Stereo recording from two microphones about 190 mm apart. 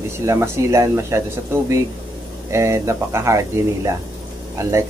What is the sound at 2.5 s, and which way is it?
Speech, 15° right (ahead or behind).